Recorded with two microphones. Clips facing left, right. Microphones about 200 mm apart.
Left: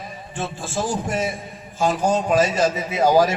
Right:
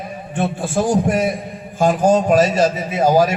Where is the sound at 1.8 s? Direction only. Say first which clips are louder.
Right 6 dB; 50° right (ahead or behind).